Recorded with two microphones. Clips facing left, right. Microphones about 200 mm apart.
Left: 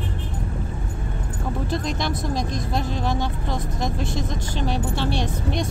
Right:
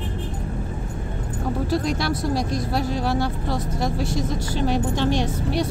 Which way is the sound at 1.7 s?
10° right (ahead or behind).